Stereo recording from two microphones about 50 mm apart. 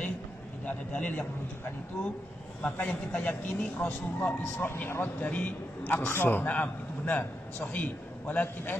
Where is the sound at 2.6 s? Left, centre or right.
Left.